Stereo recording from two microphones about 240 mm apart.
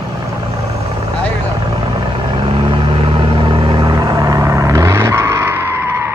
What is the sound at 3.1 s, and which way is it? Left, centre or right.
Vehicle, right.